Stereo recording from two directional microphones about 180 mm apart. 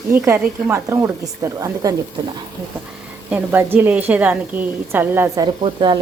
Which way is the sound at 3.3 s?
10° right (ahead or behind).